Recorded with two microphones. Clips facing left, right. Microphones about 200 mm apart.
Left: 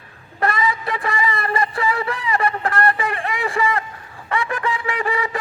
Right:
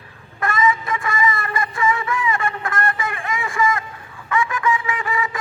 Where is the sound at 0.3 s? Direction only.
35° left (ahead or behind).